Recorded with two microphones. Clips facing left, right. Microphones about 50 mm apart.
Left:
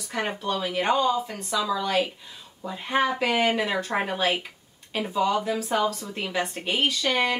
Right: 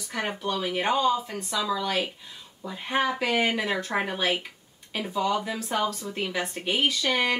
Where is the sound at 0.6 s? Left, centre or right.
Centre.